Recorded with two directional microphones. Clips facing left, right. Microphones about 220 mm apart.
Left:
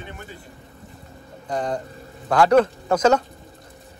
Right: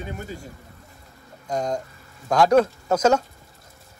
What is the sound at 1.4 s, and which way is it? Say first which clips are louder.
Speech: even; 10° right (ahead or behind).